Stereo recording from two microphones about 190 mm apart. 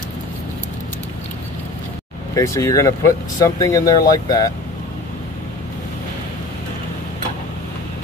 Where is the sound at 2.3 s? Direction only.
15° left (ahead or behind).